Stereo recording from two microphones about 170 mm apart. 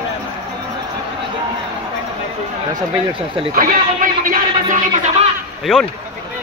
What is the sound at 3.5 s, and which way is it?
Speech, 55° right (ahead or behind).